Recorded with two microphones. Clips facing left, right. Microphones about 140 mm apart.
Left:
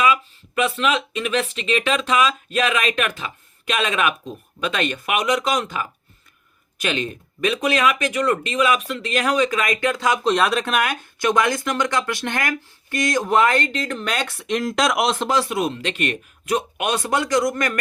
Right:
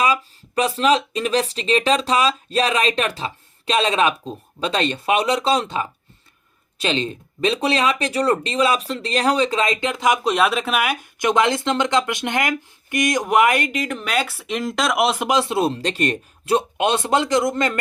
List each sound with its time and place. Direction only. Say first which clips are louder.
0.0 s speech: left 1 dB; 35° right (ahead or behind); by 10.3 s 15° right (ahead or behind)
10.3 s speech: even; 5° right (ahead or behind); by 17.7 s 25° right (ahead or behind)